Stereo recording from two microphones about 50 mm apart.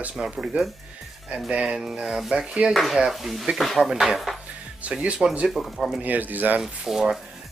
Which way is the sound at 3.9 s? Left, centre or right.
Centre.